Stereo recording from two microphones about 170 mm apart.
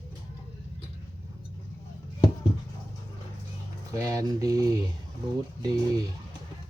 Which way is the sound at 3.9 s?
20° right (ahead or behind).